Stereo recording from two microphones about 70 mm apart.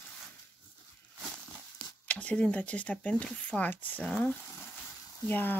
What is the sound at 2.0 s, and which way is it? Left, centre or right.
Speech, centre.